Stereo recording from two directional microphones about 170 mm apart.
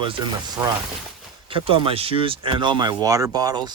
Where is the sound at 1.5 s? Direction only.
30° right (ahead or behind).